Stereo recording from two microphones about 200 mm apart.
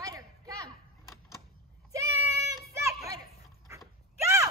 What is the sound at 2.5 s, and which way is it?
Children playing, 15° right (ahead or behind).